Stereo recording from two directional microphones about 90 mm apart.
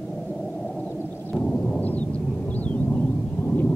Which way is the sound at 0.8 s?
20° left (ahead or behind).